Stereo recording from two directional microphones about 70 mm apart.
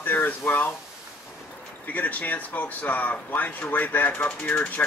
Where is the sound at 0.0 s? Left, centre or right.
Left.